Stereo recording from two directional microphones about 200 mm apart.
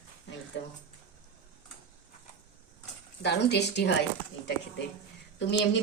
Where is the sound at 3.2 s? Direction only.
55° left (ahead or behind).